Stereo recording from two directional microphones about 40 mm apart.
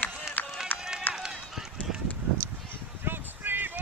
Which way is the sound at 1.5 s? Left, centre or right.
Centre.